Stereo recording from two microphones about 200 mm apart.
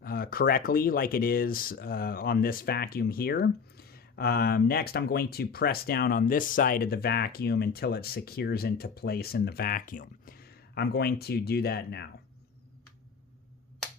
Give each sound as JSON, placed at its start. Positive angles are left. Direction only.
{"t": 0.0, "sound": "speech", "side_deg": 45}